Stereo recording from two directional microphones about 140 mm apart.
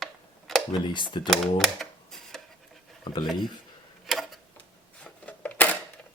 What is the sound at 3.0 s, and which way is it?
Speech, 35° left (ahead or behind).